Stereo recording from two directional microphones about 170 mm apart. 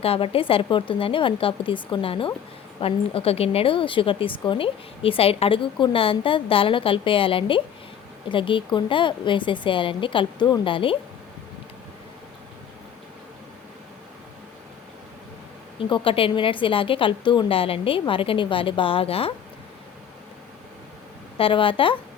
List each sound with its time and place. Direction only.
0.0 s a woman's voice: 35° left (ahead or behind)
15.8 s a woman's voice: 30° left (ahead or behind)
21.3 s a woman's voice: 30° left (ahead or behind)